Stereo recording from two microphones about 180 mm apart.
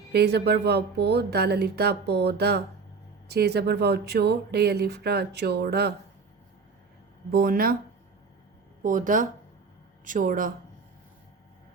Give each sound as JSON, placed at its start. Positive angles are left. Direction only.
{"t": 0.1, "sound": "speech", "side_deg": -65}
{"t": 7.3, "sound": "speech", "side_deg": -55}
{"t": 8.8, "sound": "speech", "side_deg": -45}